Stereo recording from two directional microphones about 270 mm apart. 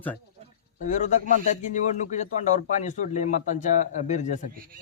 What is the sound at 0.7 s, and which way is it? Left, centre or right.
A man's voice, left.